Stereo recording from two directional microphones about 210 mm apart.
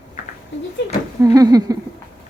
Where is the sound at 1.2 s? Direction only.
15° right (ahead or behind).